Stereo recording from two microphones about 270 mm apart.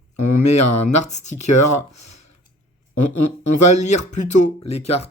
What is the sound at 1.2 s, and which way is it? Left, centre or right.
Speech, left.